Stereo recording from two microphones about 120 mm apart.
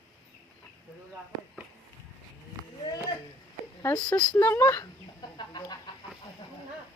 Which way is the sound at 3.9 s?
10° left (ahead or behind).